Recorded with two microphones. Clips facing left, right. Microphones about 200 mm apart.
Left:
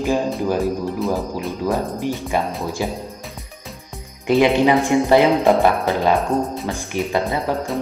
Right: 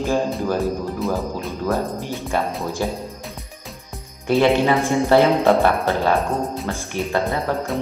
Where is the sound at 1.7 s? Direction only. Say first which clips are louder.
Left 1 dB; 15° left (ahead or behind).